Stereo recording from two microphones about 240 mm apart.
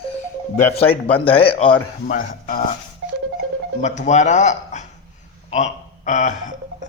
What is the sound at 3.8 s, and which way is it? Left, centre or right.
Speech, left.